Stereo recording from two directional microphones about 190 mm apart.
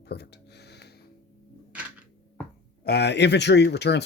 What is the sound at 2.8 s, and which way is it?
Speech, 60° left (ahead or behind).